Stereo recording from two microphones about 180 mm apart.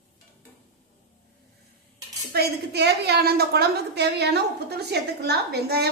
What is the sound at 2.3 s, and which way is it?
A woman's voice, 65° right (ahead or behind).